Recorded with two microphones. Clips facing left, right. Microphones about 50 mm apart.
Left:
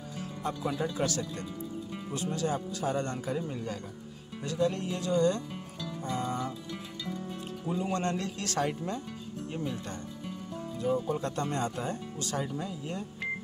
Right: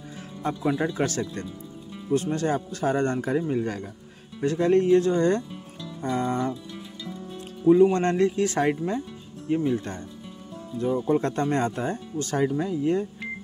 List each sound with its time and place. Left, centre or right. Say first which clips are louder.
0.2 s speech: right 6 dB; right
4.4 s speech: right 9 dB; right
6.0 s speech: right 8 dB; right
7.8 s speech: right 12 dB; right
10.8 s speech: right 7 dB; right